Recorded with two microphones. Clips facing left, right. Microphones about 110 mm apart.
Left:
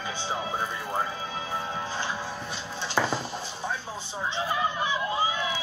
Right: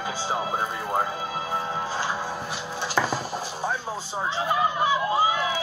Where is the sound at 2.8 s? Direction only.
10° right (ahead or behind).